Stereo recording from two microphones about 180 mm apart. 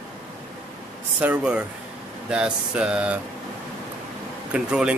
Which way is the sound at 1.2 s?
5° right (ahead or behind).